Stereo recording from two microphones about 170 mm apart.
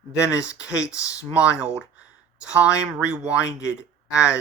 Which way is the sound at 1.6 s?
10° right (ahead or behind).